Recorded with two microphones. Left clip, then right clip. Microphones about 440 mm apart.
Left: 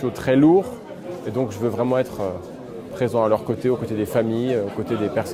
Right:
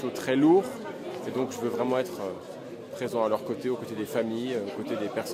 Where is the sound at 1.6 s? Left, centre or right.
Left.